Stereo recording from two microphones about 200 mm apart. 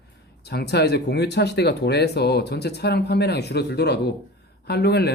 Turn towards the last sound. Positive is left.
turn(degrees=55)  # may be behind; listen again after turning